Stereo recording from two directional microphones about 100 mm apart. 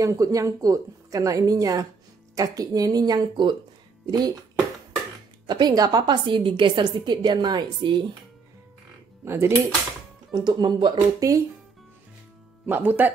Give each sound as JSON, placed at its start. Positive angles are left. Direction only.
{"t": 0.0, "sound": "a woman's voice", "side_deg": -35}
{"t": 5.5, "sound": "a woman's voice", "side_deg": -45}
{"t": 9.2, "sound": "speech", "side_deg": -25}
{"t": 10.3, "sound": "a woman's voice", "side_deg": -45}
{"t": 12.6, "sound": "speech", "side_deg": -20}